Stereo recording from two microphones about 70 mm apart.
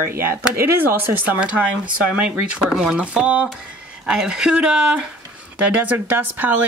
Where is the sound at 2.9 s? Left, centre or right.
Centre.